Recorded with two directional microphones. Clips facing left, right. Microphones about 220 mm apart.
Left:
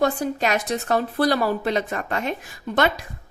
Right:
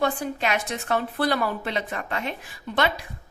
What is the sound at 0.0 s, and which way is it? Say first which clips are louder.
A woman's voice: left 4 dB; 40° left (ahead or behind).